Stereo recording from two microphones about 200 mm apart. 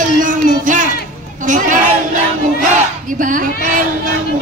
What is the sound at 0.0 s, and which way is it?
Music, 40° right (ahead or behind).